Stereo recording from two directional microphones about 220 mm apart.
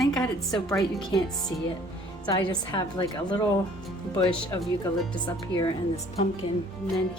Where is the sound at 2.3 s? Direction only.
20° left (ahead or behind).